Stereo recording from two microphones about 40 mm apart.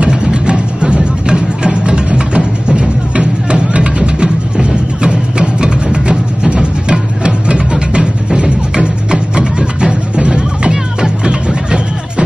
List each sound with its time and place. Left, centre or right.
0.0 s music: right